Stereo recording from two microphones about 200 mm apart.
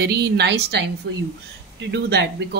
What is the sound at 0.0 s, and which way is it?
Speech, 55° right (ahead or behind).